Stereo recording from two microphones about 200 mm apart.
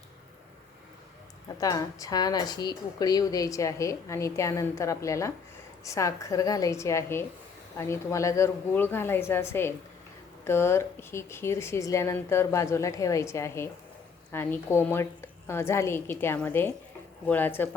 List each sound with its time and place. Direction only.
1.5 s a woman's voice: 15° left (ahead or behind)